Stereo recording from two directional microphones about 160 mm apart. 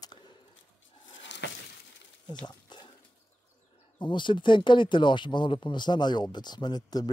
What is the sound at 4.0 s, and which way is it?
Speech, 30° left (ahead or behind).